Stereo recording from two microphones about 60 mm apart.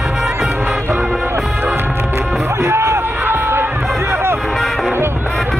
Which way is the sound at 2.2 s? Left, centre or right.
Centre.